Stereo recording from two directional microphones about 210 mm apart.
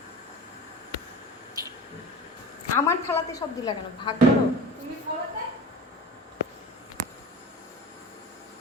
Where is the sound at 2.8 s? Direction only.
15° left (ahead or behind).